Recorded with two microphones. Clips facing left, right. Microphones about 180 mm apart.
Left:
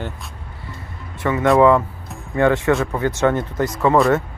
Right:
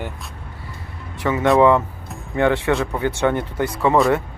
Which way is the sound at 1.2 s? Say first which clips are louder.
Left 1 dB; 15° right (ahead or behind).